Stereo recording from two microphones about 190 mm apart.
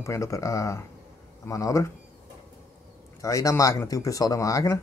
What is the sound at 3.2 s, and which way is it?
Speech, 15° left (ahead or behind).